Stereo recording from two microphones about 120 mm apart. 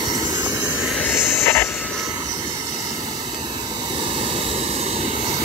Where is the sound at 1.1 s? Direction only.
20° left (ahead or behind).